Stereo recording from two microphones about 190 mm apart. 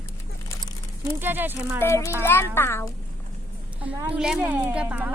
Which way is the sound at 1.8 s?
15° left (ahead or behind).